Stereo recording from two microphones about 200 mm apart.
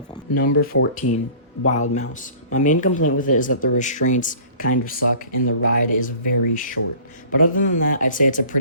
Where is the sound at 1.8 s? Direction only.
40° left (ahead or behind).